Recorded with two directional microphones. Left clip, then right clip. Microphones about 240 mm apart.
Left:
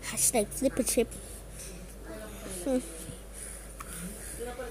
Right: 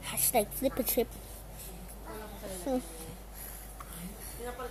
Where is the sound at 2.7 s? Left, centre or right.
Centre.